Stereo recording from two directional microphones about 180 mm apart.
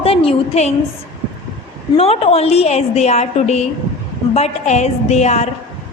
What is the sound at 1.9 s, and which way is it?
A woman's voice, 35° left (ahead or behind).